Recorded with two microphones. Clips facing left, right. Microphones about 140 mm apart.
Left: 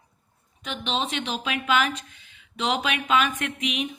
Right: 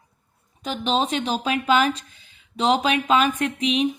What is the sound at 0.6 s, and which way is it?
A woman's voice, 35° right (ahead or behind).